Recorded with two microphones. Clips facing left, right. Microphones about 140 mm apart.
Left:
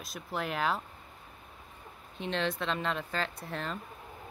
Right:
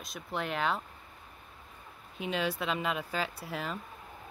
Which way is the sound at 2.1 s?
5° right (ahead or behind).